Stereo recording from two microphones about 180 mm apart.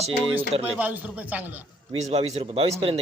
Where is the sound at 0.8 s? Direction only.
10° right (ahead or behind).